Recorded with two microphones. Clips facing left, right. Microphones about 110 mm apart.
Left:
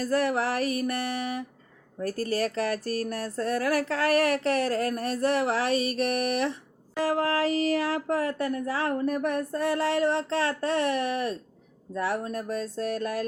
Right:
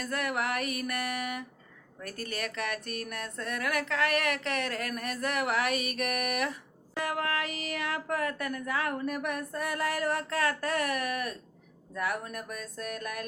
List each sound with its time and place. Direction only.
0.0 s speech: 35° left (ahead or behind)